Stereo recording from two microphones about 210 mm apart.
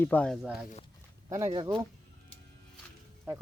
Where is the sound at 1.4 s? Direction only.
20° right (ahead or behind).